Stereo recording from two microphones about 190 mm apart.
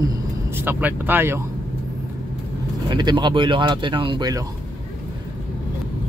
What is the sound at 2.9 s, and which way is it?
Speech, 25° right (ahead or behind).